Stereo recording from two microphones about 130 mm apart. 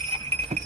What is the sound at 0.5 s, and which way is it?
Jingle bell, 60° right (ahead or behind).